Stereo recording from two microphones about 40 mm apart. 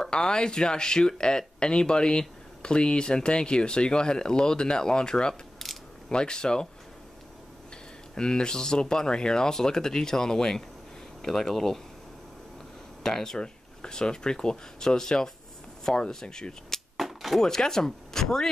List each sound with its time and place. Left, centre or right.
0.0 s speech: left
8.1 s speech: centre
13.0 s speech: centre
16.9 s a sound: centre
17.4 s speech: centre